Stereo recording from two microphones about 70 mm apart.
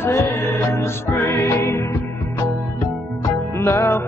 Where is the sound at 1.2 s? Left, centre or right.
Left.